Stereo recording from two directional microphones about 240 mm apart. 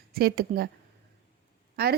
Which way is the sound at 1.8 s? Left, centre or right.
Right.